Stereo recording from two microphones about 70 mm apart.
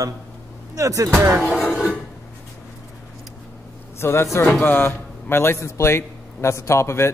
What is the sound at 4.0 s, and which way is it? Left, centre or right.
A man's voice, left.